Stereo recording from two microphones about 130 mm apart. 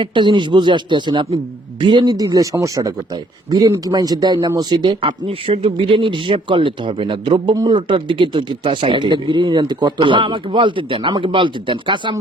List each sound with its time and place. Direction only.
0.0 s speech: 40° right (ahead or behind)